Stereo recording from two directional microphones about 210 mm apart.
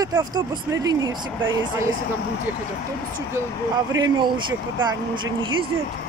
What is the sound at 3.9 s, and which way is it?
Speech, 15° right (ahead or behind).